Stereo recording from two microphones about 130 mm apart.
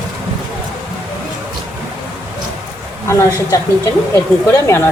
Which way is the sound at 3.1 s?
25° left (ahead or behind).